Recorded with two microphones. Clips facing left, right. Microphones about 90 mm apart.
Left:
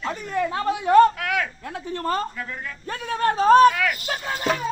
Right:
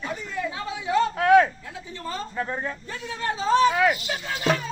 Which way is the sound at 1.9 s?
55° left (ahead or behind).